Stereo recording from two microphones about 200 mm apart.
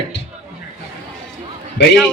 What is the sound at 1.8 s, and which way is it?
Speech, 60° left (ahead or behind).